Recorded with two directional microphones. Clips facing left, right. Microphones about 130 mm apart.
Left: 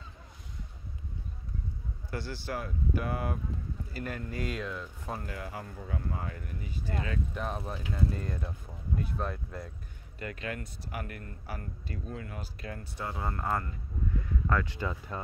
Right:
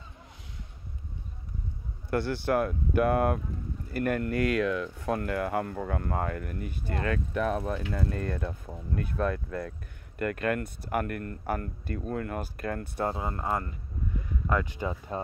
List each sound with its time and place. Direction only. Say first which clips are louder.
2.0 s speech: right 10 dB; 60° right (ahead or behind)
13.1 s speech: right 2 dB; 20° right (ahead or behind)